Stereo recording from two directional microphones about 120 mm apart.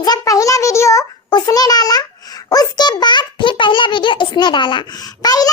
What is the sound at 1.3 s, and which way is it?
Babbling, 35° left (ahead or behind).